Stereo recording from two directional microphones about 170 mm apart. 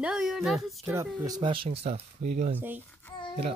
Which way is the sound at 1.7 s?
40° right (ahead or behind).